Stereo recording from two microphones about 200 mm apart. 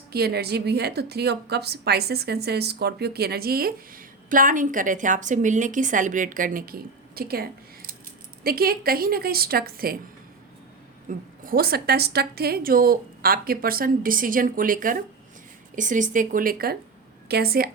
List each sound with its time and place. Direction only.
0.1 s a woman's voice: 50° right (ahead or behind)
11.1 s a woman's voice: 40° right (ahead or behind)